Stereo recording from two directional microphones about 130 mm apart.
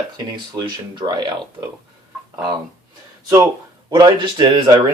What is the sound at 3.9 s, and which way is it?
Speech, 35° right (ahead or behind).